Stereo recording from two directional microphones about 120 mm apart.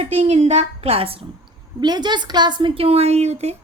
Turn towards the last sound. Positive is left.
turn(degrees=-60)  # may be behind; listen again after turning